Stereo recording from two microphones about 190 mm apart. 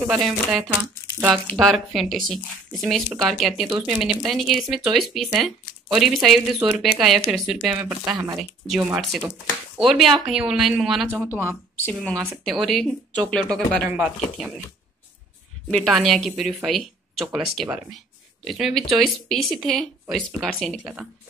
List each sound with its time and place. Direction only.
0.0 s speech: 5° right (ahead or behind)
11.8 s speech: 5° left (ahead or behind)
13.8 s speech: 10° right (ahead or behind)
15.7 s speech: centre (ahead or behind)